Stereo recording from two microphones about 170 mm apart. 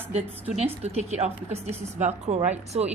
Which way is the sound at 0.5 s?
40° right (ahead or behind).